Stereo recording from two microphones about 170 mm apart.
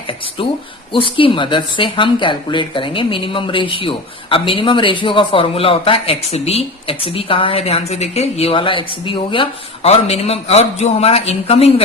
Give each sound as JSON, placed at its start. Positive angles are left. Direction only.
{"t": 0.4, "sound": "speech", "side_deg": 30}